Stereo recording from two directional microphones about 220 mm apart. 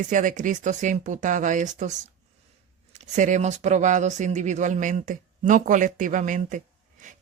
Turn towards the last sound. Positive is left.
turn(degrees=-35)  # may be behind; listen again after turning